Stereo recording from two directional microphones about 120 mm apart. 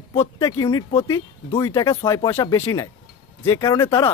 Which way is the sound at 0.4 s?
35° left (ahead or behind).